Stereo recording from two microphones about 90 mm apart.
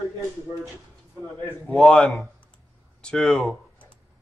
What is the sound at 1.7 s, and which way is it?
Speech, 10° left (ahead or behind).